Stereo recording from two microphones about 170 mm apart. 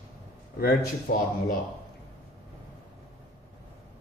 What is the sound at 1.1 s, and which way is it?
Speech, 90° left.